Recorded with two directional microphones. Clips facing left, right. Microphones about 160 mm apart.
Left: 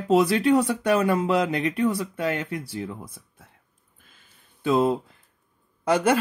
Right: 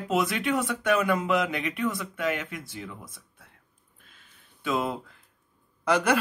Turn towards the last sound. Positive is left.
turn(degrees=25)  # may be behind; listen again after turning